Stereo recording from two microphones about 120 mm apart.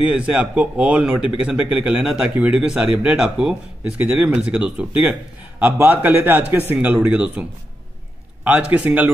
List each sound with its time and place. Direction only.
0.0 s speech: 10° right (ahead or behind)
8.5 s speech: 15° right (ahead or behind)